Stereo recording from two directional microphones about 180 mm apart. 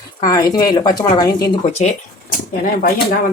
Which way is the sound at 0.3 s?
20° left (ahead or behind).